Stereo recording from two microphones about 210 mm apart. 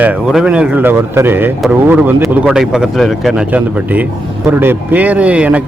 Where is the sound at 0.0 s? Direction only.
5° right (ahead or behind).